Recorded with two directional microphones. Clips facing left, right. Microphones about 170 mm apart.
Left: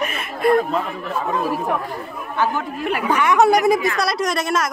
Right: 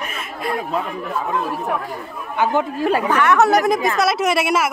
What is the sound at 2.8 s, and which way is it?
Speech, 30° right (ahead or behind).